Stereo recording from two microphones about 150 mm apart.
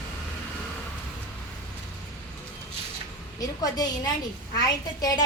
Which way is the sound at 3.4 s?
25° left (ahead or behind).